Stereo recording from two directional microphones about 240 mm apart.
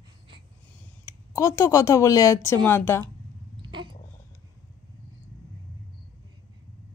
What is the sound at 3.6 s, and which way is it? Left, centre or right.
Cat, centre.